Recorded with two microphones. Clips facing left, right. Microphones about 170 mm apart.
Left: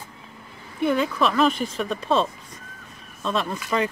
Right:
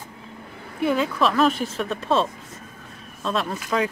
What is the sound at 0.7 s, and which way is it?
Speech, centre (ahead or behind).